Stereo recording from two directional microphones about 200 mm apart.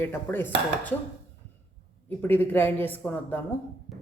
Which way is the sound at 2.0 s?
10° left (ahead or behind).